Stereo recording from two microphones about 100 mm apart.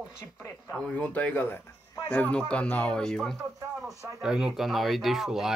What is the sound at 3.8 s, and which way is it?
Speech, 5° right (ahead or behind).